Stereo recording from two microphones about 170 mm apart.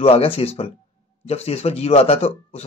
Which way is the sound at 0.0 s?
35° left (ahead or behind).